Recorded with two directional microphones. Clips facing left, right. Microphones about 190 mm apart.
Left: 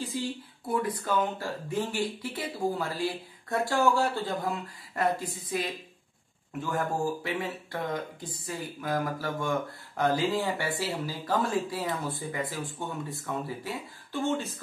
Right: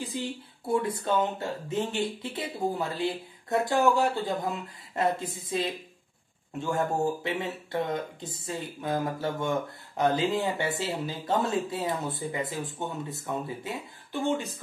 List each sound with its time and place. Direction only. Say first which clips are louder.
0.0 s speech: left 1 dB; 20° right (ahead or behind)